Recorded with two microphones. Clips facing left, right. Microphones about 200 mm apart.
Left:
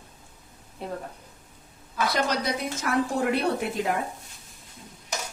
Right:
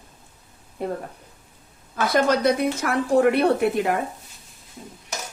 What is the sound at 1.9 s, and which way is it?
Speech, 50° right (ahead or behind).